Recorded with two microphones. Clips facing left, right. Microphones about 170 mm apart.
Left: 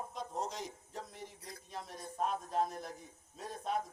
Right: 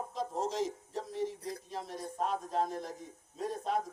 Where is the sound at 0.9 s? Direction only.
30° right (ahead or behind).